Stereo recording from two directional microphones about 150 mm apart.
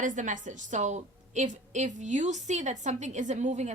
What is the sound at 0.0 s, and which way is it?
A woman's voice, 55° right (ahead or behind).